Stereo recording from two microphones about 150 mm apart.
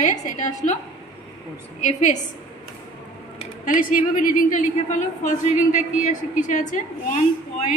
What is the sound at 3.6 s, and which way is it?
A woman's voice, 65° left (ahead or behind).